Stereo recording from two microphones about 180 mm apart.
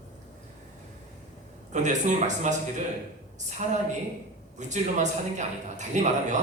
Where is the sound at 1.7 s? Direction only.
40° right (ahead or behind).